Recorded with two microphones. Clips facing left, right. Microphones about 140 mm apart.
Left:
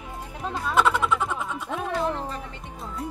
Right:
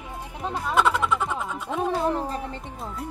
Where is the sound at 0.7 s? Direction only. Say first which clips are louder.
Even; centre (ahead or behind).